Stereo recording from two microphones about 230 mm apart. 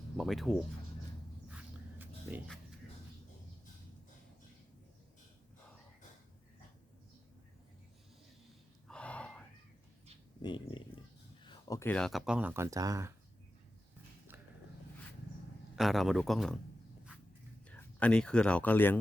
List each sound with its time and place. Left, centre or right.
0.2 s speech: centre
1.5 s a sound: centre
8.9 s gasp: centre
10.4 s speech: left; by 13.1 s centre
15.7 s speech: centre
17.7 s speech: centre